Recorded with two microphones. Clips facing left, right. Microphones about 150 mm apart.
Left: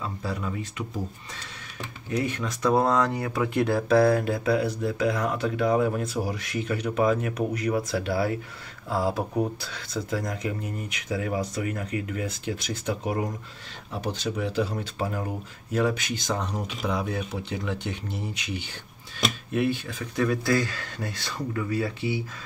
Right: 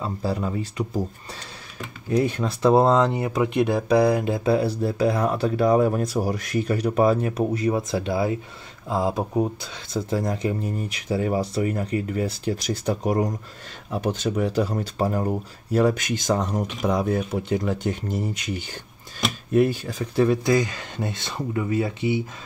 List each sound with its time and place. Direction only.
0.0 s speech: 35° right (ahead or behind)
20.4 s speech: 20° right (ahead or behind)